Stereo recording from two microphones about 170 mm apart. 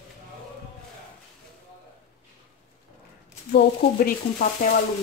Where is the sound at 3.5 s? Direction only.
60° left (ahead or behind).